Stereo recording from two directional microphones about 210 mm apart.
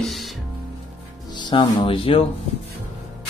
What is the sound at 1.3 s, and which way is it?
Speech, 25° left (ahead or behind).